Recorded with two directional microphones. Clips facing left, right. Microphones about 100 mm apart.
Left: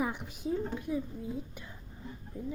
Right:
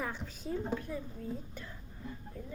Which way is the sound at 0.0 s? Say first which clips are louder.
Left 5 dB; 15° left (ahead or behind).